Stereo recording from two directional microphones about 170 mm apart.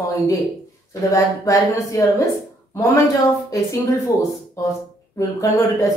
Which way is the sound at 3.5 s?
20° left (ahead or behind).